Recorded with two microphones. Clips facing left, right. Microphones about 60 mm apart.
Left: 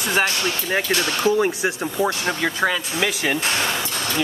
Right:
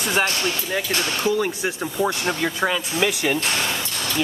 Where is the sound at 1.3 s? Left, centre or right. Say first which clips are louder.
Left 3 dB; left.